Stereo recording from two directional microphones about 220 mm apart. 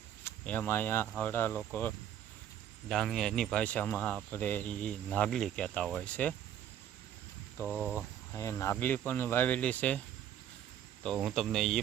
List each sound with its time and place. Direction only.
0.3 s speech: 5° left (ahead or behind)
2.9 s speech: centre (ahead or behind)
7.7 s speech: 5° right (ahead or behind)
7.9 s speech: 10° left (ahead or behind)
11.0 s speech: centre (ahead or behind)